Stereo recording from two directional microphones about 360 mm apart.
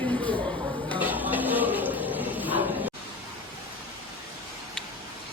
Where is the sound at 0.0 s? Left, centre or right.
Centre.